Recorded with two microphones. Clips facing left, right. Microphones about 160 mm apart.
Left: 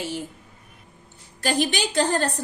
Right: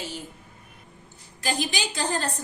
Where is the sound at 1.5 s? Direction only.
60° left (ahead or behind).